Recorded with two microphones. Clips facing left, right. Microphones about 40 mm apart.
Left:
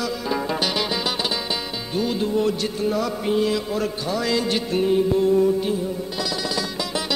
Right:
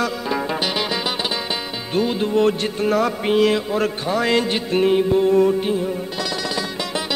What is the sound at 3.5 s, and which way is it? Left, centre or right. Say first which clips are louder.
Music: right 4 dB; right.